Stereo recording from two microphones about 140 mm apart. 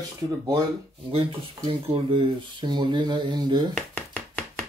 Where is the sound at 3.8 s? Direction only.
5° left (ahead or behind).